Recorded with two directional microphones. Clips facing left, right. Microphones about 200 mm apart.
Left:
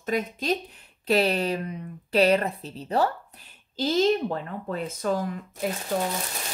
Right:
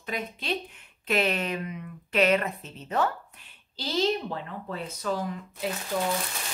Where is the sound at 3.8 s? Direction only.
45° left (ahead or behind).